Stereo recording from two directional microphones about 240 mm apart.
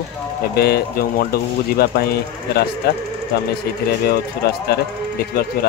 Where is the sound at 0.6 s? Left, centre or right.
Left.